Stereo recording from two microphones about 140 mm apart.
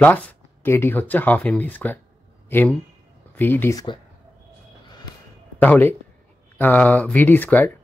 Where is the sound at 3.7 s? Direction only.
35° left (ahead or behind).